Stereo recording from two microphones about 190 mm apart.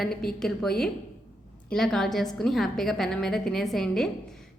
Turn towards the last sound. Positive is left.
turn(degrees=0)  # may be behind; listen again after turning